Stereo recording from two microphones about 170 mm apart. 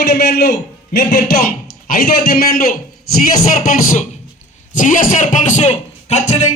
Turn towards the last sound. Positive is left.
turn(degrees=40)  # may be behind; listen again after turning